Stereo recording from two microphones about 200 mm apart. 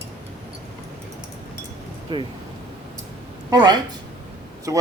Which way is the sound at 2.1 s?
25° right (ahead or behind).